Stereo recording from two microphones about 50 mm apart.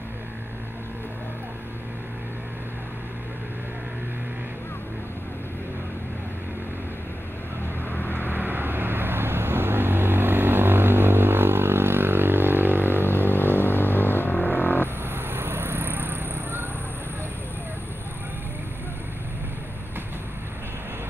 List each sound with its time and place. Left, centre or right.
7.9 s vehicle: left
8.3 s vehicle: right
13.2 s vehicle: left
15.0 s vehicle: right